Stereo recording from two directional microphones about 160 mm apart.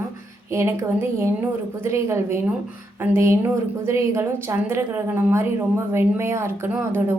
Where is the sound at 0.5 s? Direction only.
15° right (ahead or behind).